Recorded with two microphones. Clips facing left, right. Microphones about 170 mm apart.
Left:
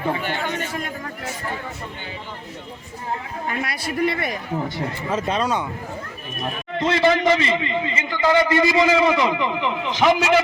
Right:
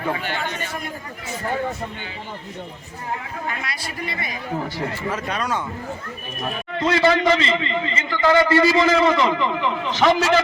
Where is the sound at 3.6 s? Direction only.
55° left (ahead or behind).